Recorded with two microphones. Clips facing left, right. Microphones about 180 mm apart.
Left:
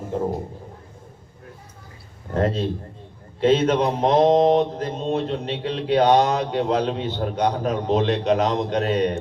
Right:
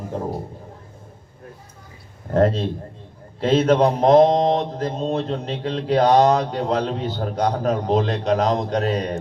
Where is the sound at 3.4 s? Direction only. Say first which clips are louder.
Right 2 dB; 35° right (ahead or behind).